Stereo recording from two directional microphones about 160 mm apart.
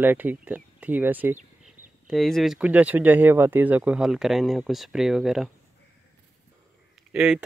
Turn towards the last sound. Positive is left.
turn(degrees=-5)  # may be behind; listen again after turning